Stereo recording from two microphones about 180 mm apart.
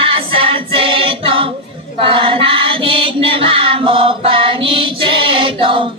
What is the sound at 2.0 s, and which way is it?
Chant, 30° right (ahead or behind).